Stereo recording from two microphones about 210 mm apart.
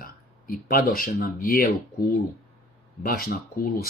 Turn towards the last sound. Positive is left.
turn(degrees=45)  # may be behind; listen again after turning